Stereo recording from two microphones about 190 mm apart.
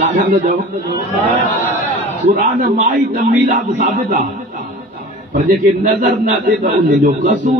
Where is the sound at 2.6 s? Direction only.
45° right (ahead or behind).